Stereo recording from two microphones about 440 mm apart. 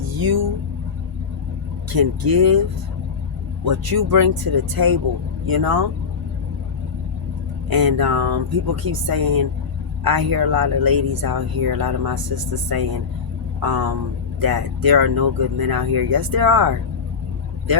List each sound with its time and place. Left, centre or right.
0.1 s vehicle: right
1.9 s speech: right
3.6 s speech: right
7.7 s speech: right